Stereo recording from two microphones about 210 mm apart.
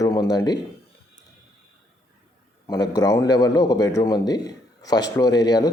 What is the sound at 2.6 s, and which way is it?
A man's voice, 15° left (ahead or behind).